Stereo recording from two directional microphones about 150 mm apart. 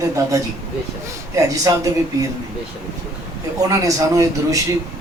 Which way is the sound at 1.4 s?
25° right (ahead or behind).